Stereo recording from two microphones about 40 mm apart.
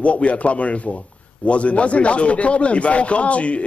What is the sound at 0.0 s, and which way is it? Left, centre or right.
Speech, left.